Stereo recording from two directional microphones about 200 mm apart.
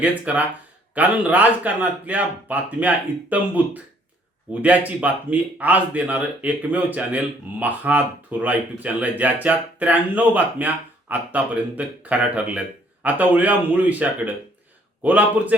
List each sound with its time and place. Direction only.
0.0 s speech: 5° right (ahead or behind)
4.6 s speech: 5° right (ahead or behind)